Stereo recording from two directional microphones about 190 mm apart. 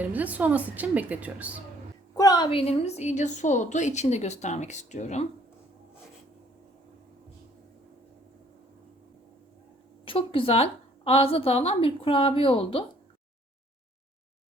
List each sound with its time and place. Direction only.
0.0 s a woman's voice: 10° right (ahead or behind)
2.1 s a woman's voice: 20° left (ahead or behind); by 5.2 s 35° left (ahead or behind)
10.1 s a woman's voice: 30° left (ahead or behind)